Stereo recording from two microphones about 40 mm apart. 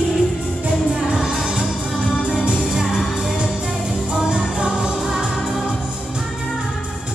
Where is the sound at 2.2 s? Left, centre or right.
Right.